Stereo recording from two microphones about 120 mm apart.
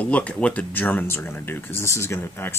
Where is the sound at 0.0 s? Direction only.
10° left (ahead or behind).